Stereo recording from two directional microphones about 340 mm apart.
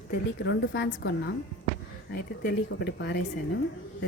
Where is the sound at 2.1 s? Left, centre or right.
Left.